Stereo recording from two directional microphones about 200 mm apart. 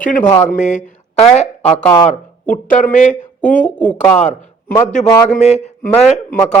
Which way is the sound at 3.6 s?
10° left (ahead or behind).